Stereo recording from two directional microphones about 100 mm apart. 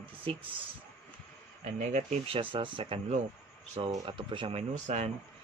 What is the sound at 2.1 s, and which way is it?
Speech, 75° right (ahead or behind).